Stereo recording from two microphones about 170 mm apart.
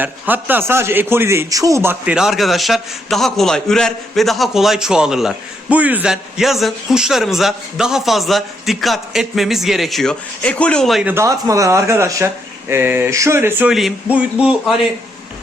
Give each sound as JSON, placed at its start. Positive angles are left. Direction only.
{"t": 0.0, "sound": "a man's voice", "side_deg": -10}
{"t": 11.1, "sound": "speech", "side_deg": -15}